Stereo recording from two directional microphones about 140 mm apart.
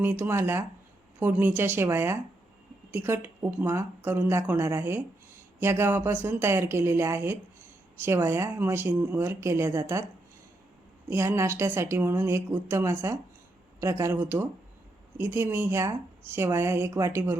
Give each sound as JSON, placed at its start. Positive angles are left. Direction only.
{"t": 0.0, "sound": "speech", "side_deg": -15}
{"t": 11.1, "sound": "speech", "side_deg": -20}